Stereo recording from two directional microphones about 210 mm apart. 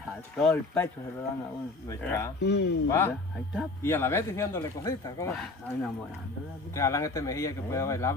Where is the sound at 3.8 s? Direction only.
10° left (ahead or behind).